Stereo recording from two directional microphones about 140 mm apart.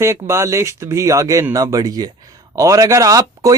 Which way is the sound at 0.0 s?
20° right (ahead or behind).